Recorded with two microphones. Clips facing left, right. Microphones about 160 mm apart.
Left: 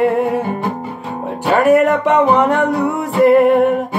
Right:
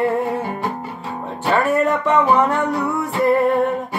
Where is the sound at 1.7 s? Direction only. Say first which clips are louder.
Left 6 dB; 75° left (ahead or behind).